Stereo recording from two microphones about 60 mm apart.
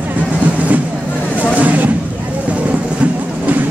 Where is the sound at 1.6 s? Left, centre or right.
Right.